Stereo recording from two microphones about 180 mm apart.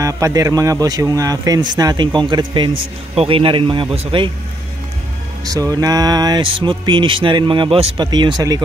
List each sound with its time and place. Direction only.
0.0 s speech: 20° right (ahead or behind)
5.4 s speech: 20° right (ahead or behind)